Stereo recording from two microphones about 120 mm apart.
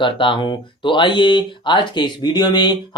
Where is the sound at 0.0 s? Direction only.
45° left (ahead or behind).